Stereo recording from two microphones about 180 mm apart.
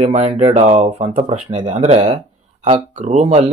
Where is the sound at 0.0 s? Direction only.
35° right (ahead or behind).